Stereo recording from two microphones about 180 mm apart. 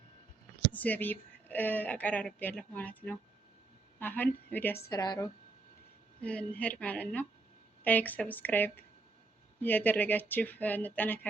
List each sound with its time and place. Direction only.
0.7 s speech: 10° left (ahead or behind)
4.9 s speech: 20° left (ahead or behind)
6.1 s speech: 5° left (ahead or behind)